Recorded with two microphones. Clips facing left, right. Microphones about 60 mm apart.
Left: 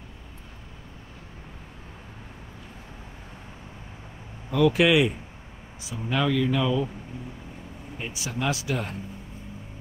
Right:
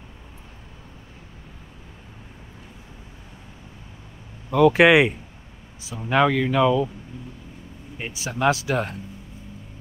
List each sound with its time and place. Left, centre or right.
4.5 s speech: right
6.0 s speech: right
8.3 s speech: right